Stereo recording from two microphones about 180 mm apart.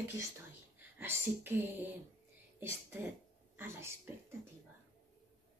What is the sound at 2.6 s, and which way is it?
A woman's voice, 10° right (ahead or behind).